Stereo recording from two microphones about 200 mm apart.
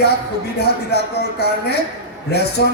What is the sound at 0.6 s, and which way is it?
Speech, 55° left (ahead or behind).